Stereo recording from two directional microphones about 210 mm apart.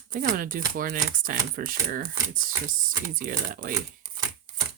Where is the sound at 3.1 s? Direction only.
40° right (ahead or behind).